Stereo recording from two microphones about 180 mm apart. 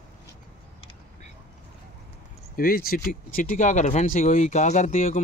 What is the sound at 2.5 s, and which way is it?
Speech, 55° left (ahead or behind).